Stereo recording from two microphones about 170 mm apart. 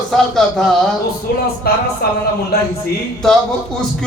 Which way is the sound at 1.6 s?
65° left (ahead or behind).